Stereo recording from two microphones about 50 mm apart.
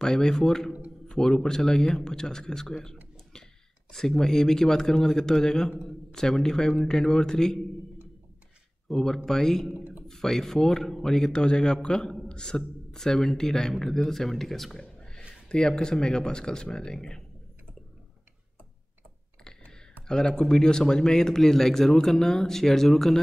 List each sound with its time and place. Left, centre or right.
0.0 s a man's voice: centre
8.8 s a man's voice: centre
9.8 s a sound: right
10.0 s a man's voice: centre
14.8 s speech: centre
20.1 s a man's voice: centre